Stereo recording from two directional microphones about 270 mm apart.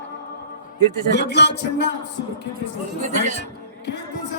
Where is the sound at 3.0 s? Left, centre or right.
Right.